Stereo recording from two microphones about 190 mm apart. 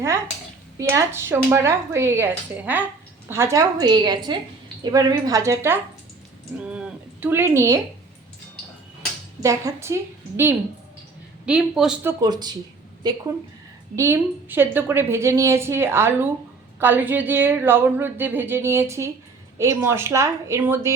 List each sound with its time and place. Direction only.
0.8 s a woman's voice: 15° right (ahead or behind)
6.7 s a sound: 5° right (ahead or behind)
9.4 s a woman's voice: 15° right (ahead or behind)
12.2 s a woman's voice: 20° right (ahead or behind)
13.9 s a woman's voice: 15° right (ahead or behind)